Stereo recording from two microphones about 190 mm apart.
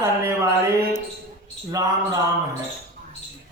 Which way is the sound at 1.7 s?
15° right (ahead or behind).